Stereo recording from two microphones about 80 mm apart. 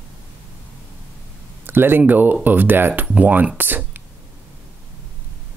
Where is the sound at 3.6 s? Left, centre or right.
Right.